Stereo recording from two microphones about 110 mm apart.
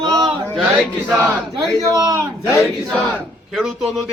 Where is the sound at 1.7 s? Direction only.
30° right (ahead or behind).